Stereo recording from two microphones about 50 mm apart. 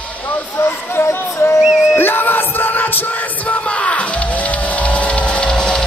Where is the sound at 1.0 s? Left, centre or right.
Left.